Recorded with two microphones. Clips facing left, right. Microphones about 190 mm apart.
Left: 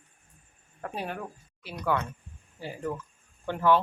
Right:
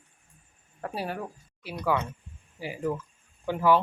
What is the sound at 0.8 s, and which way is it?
Speech, 5° right (ahead or behind).